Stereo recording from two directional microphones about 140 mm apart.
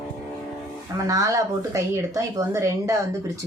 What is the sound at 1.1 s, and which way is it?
Speech, 25° right (ahead or behind).